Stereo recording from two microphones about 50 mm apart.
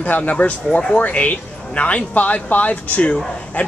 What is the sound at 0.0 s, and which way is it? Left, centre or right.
Speech, left.